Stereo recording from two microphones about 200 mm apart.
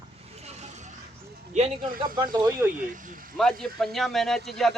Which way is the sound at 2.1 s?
20° right (ahead or behind).